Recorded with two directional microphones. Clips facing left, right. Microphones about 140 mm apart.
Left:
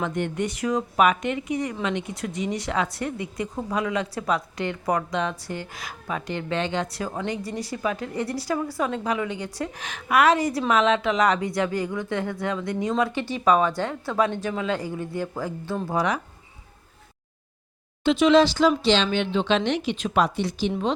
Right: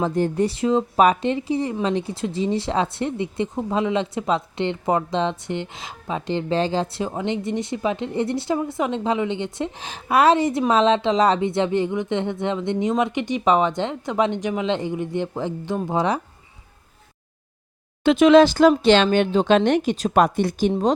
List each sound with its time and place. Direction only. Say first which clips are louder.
0.0 s speech: right 6 dB; 35° right (ahead or behind); by 16.0 s 20° right (ahead or behind)
18.0 s speech: right 5 dB; 55° right (ahead or behind)